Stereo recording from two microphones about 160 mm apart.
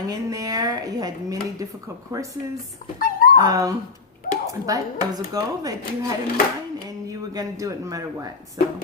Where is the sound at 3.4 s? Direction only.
20° right (ahead or behind).